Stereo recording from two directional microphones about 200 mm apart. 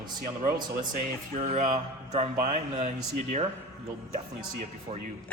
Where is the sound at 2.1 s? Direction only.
35° right (ahead or behind).